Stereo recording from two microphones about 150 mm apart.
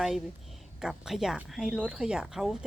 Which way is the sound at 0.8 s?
5° right (ahead or behind).